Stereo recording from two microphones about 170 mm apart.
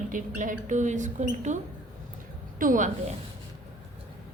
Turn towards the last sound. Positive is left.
turn(degrees=-50)  # may be behind; listen again after turning